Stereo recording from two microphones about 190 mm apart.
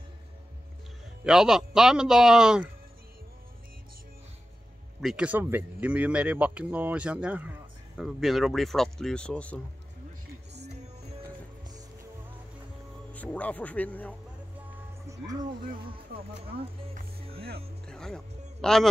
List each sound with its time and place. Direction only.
1.2 s speech: centre (ahead or behind)
5.0 s speech: 5° right (ahead or behind)
13.1 s speech: 10° left (ahead or behind)
15.1 s music: 15° right (ahead or behind)
15.6 s speech: 50° right (ahead or behind)
15.9 s speech: 30° right (ahead or behind)
17.8 s music: 5° left (ahead or behind)